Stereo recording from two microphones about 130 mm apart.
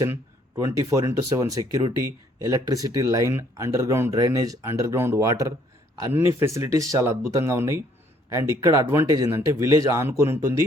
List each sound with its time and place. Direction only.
0.0 s speech: 20° right (ahead or behind)